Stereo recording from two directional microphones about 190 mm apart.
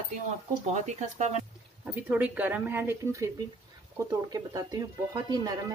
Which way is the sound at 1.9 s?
10° right (ahead or behind).